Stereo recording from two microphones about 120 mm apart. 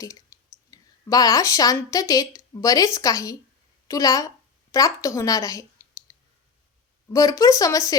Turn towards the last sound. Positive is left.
turn(degrees=30)  # may be behind; listen again after turning